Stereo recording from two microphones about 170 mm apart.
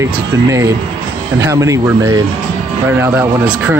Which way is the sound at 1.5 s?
20° right (ahead or behind).